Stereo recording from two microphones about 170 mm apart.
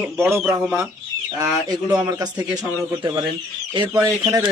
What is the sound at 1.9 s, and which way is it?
Speech, 20° right (ahead or behind).